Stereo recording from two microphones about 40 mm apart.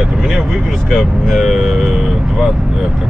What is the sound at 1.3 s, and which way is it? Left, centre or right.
Speech, centre.